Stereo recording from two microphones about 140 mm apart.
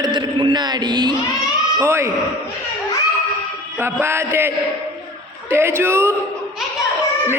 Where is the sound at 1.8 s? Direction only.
20° right (ahead or behind).